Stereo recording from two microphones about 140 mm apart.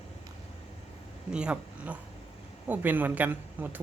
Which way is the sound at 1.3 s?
5° right (ahead or behind).